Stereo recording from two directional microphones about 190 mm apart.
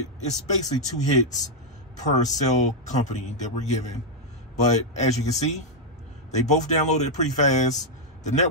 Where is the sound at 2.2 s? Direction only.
40° left (ahead or behind).